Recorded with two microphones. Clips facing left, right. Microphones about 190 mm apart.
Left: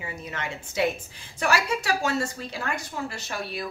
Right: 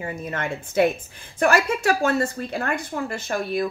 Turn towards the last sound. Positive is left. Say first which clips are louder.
# right 8 dB
turn(degrees=-50)  # may be behind; listen again after turning